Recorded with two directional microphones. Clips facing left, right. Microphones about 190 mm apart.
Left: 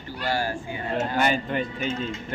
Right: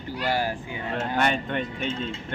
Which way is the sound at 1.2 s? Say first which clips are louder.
Even; 5° left (ahead or behind).